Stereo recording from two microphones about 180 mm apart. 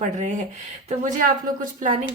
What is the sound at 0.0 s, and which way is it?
Speech, 40° right (ahead or behind).